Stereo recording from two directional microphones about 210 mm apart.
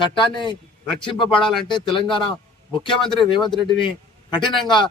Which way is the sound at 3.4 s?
Centre (ahead or behind).